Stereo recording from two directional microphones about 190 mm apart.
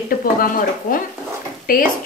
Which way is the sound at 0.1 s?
50° left (ahead or behind).